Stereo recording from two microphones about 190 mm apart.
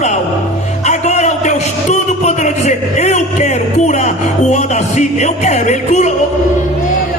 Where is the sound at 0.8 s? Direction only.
35° left (ahead or behind).